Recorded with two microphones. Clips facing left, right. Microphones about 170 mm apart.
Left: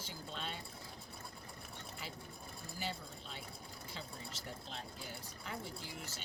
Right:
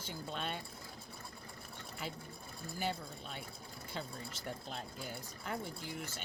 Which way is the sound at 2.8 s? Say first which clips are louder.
Right 5 dB; 55° right (ahead or behind).